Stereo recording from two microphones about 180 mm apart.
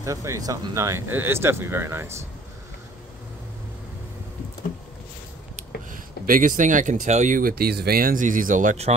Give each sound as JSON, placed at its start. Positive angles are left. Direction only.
{"t": 0.0, "sound": "speech", "side_deg": -15}
{"t": 5.9, "sound": "speech", "side_deg": -50}